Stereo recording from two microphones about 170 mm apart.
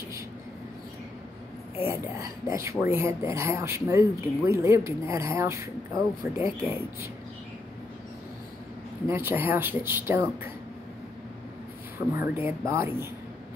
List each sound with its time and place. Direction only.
1.9 s speech: 20° right (ahead or behind)
9.0 s speech: 15° right (ahead or behind)
12.2 s speech: 10° right (ahead or behind)